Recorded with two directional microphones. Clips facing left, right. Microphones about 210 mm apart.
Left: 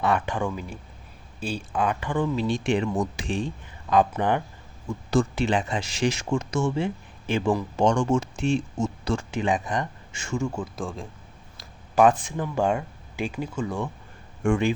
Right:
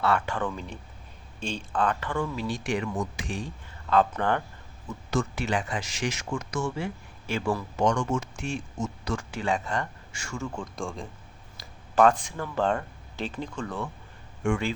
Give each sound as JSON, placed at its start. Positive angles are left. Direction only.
{"t": 0.0, "sound": "speech", "side_deg": 15}
{"t": 3.8, "sound": "speech", "side_deg": 15}
{"t": 5.1, "sound": "speech", "side_deg": 30}
{"t": 7.8, "sound": "speech", "side_deg": 30}
{"t": 11.9, "sound": "speech", "side_deg": 15}
{"t": 14.4, "sound": "speech", "side_deg": 45}